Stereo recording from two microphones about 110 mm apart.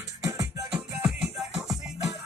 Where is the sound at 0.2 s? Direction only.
30° right (ahead or behind).